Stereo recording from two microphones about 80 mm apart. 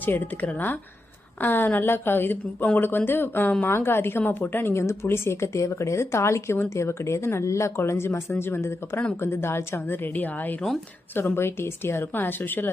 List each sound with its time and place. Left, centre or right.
0.0 s a woman's voice: left